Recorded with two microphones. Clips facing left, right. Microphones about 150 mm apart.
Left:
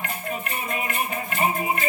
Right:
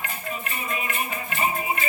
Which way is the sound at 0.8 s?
45° left (ahead or behind).